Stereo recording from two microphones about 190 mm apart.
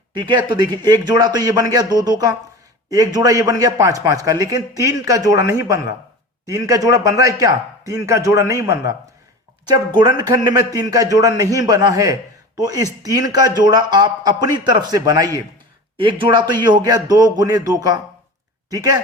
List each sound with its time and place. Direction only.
0.1 s a man's voice: 25° right (ahead or behind)